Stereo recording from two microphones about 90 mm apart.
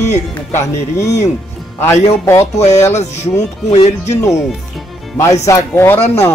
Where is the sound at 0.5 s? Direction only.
35° left (ahead or behind).